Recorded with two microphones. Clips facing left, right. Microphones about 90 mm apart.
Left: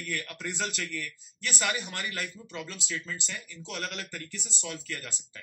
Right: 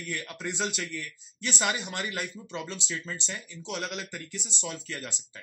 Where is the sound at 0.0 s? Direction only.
20° right (ahead or behind).